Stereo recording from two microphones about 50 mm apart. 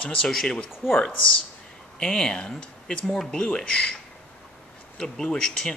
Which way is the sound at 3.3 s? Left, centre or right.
Centre.